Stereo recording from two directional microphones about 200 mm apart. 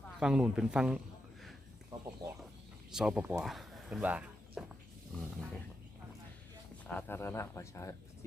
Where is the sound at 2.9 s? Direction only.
5° right (ahead or behind).